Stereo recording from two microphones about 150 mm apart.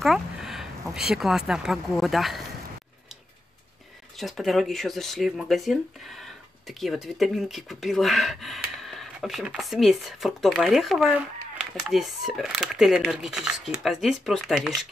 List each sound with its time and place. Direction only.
0.0 s a sound: centre (ahead or behind)
0.9 s speech: 5° right (ahead or behind)
4.2 s speech: centre (ahead or behind)